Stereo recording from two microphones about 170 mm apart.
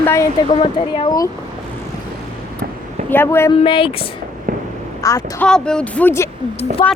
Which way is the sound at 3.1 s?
15° left (ahead or behind).